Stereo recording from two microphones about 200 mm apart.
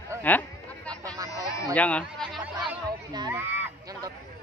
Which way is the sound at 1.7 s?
5° left (ahead or behind).